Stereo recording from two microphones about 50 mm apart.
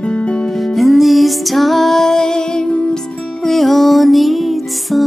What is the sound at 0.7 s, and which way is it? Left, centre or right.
Music, centre.